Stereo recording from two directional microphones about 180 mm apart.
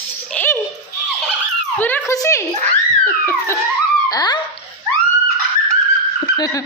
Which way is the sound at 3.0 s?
15° left (ahead or behind).